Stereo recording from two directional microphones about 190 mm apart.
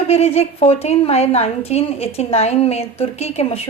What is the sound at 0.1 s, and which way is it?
A woman's voice, 35° left (ahead or behind).